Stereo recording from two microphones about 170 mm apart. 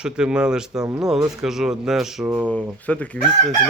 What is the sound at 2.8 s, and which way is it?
Chicken, 10° left (ahead or behind).